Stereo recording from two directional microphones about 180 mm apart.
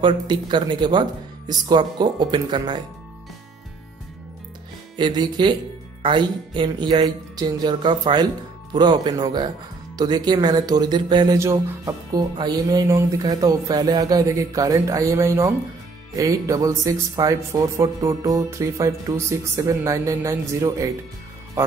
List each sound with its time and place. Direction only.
0.0 s speech: 25° right (ahead or behind)
4.9 s speech: 25° right (ahead or behind)